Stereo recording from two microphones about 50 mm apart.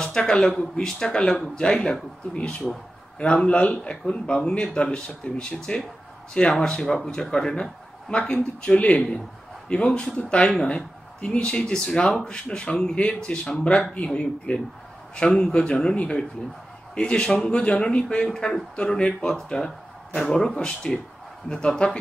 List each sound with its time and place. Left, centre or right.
0.0 s speech: centre
9.8 s speech: centre